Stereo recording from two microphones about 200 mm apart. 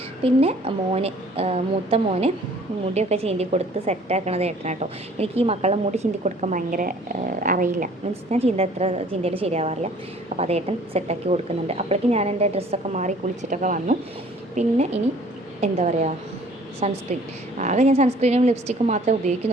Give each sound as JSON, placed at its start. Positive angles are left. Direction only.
{"t": 0.3, "sound": "a woman's voice", "side_deg": -30}
{"t": 8.3, "sound": "a woman's voice", "side_deg": -30}